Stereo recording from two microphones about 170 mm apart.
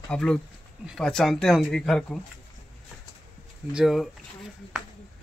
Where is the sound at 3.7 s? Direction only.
Centre (ahead or behind).